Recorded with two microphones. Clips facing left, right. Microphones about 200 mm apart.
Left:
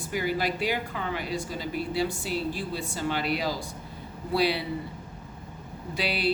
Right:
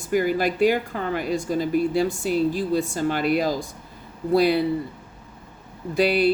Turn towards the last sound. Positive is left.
turn(degrees=-45)  # may be behind; listen again after turning